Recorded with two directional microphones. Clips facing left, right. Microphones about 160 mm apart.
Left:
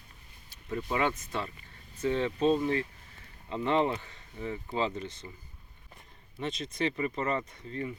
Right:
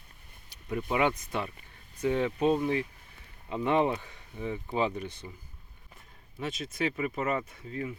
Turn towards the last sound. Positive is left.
turn(degrees=-5)  # may be behind; listen again after turning